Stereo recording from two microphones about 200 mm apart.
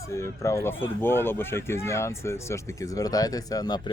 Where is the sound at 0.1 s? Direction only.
15° left (ahead or behind).